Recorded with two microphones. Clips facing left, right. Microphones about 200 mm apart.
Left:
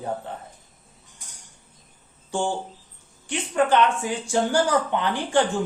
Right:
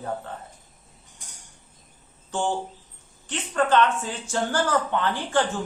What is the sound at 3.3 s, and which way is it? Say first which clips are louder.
Speech: left 2 dB; 10° left (ahead or behind).